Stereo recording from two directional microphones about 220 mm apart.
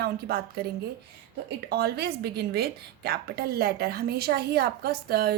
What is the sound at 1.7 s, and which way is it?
A woman's voice, 45° right (ahead or behind).